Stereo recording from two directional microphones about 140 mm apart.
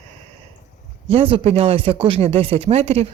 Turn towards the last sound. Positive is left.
turn(degrees=-45)  # may be behind; listen again after turning